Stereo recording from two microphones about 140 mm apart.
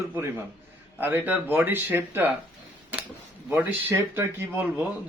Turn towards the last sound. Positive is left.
turn(degrees=-15)  # may be behind; listen again after turning